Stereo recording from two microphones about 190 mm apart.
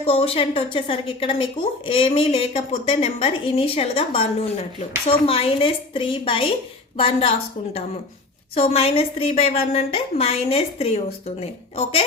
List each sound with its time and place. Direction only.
0.0 s a woman's voice: 30° left (ahead or behind)